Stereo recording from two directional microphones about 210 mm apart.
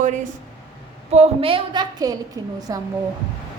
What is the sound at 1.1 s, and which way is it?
A woman's voice, 30° right (ahead or behind).